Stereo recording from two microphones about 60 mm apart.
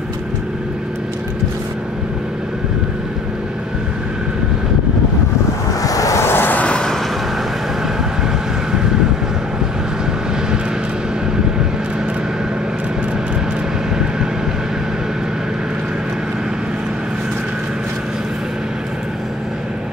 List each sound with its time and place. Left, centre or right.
5.8 s vehicle: left
6.2 s vehicle: left
6.6 s vehicle: centre
8.7 s vehicle: centre